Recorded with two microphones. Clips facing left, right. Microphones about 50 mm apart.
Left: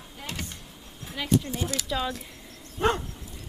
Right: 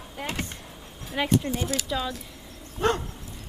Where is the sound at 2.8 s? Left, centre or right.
Centre.